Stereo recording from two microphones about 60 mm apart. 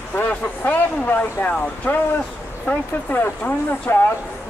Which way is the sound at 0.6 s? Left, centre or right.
Left.